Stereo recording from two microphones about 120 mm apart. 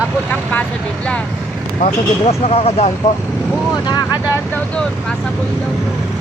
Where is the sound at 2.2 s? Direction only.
55° left (ahead or behind).